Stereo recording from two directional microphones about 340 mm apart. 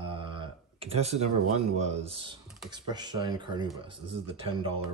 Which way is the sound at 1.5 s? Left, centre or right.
Centre.